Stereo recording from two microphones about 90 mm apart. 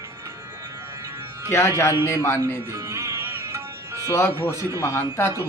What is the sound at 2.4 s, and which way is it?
Music, 35° right (ahead or behind).